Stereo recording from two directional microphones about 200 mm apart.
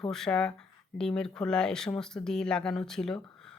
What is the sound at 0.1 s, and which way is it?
Speech, 5° left (ahead or behind).